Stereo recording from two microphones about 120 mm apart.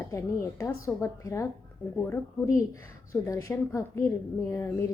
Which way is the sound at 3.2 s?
25° left (ahead or behind).